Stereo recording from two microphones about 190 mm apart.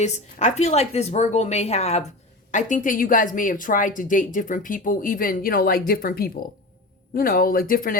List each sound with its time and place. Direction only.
0.0 s a woman's voice: 35° left (ahead or behind)